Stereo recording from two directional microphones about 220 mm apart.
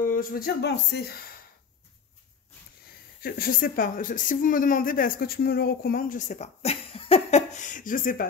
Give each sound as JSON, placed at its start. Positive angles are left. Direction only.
{"t": 0.0, "sound": "speech", "side_deg": 40}
{"t": 3.2, "sound": "speech", "side_deg": 45}